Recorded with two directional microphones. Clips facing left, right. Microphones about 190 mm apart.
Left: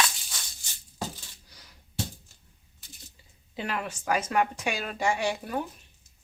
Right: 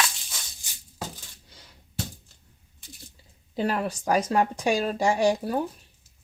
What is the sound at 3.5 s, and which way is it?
Speech, 40° right (ahead or behind).